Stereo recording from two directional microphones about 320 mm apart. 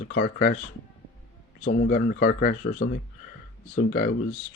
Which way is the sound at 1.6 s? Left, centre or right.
Left.